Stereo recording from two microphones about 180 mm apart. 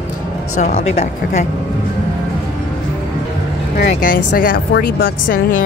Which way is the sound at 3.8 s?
50° left (ahead or behind).